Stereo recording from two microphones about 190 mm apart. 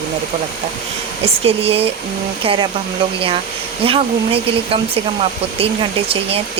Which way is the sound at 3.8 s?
30° right (ahead or behind).